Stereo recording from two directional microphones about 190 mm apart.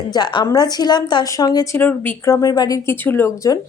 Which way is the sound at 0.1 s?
25° left (ahead or behind).